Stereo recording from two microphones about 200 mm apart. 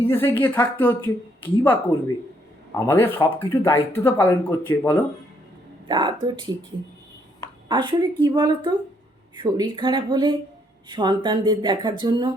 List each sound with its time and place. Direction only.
0.0 s speech: 10° left (ahead or behind)
2.7 s speech: 15° left (ahead or behind)
5.9 s speech: 25° right (ahead or behind)
7.7 s speech: 20° right (ahead or behind)